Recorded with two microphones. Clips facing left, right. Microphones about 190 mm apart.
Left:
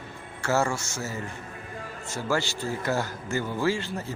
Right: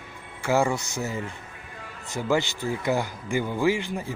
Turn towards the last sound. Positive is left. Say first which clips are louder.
# right 3 dB
turn(degrees=-15)  # may be behind; listen again after turning